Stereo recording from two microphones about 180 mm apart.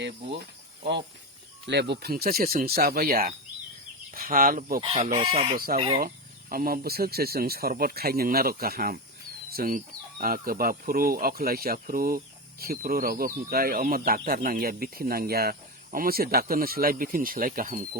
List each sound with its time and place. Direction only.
1.6 s speech: 70° right (ahead or behind); by 4.8 s 55° right (ahead or behind)
4.8 s speech: 30° right (ahead or behind)
6.0 s speech: 50° right (ahead or behind)